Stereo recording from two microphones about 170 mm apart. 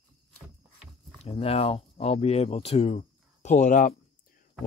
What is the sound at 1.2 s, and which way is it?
Speech, 35° left (ahead or behind).